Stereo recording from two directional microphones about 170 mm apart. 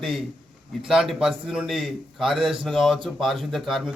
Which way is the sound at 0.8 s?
5° right (ahead or behind).